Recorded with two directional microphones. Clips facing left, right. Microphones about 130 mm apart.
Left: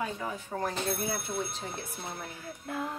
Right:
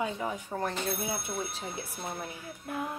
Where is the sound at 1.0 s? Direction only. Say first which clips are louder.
Left 1 dB; 10° right (ahead or behind).